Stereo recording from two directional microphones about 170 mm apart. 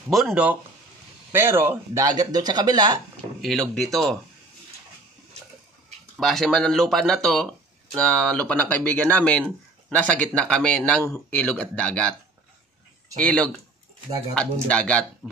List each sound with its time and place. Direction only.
0.1 s speech: centre (ahead or behind); by 3.0 s 25° right (ahead or behind)
3.4 s speech: centre (ahead or behind)
6.1 s speech: 5° left (ahead or behind)
13.2 s speech: 5° left (ahead or behind)